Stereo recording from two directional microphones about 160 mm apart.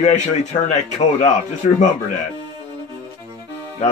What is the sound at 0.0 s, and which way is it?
Speech, 45° left (ahead or behind).